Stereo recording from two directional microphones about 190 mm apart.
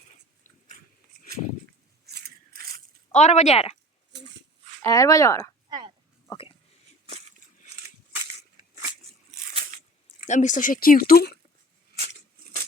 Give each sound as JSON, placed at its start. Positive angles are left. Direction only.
{"t": 2.0, "sound": "scissors", "side_deg": -55}
{"t": 3.1, "sound": "a woman's voice", "side_deg": 35}
{"t": 4.1, "sound": "dog", "side_deg": -65}
{"t": 4.8, "sound": "speech", "side_deg": 20}
{"t": 5.6, "sound": "a sound", "side_deg": -25}
{"t": 7.1, "sound": "a sound", "side_deg": -35}
{"t": 10.2, "sound": "speech", "side_deg": 40}